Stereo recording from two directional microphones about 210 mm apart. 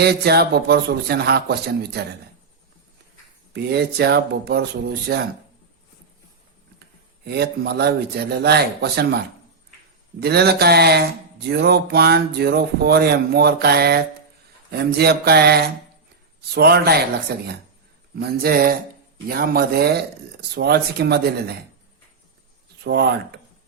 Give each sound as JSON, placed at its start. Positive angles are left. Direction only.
{"t": 0.0, "sound": "speech", "side_deg": -50}
{"t": 3.5, "sound": "speech", "side_deg": -50}
{"t": 7.3, "sound": "speech", "side_deg": -50}
{"t": 18.2, "sound": "speech", "side_deg": -45}
{"t": 22.8, "sound": "speech", "side_deg": -50}